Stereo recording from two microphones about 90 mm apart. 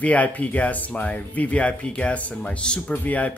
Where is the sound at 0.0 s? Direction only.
15° left (ahead or behind).